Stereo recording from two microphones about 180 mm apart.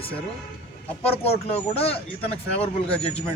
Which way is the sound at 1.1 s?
35° left (ahead or behind).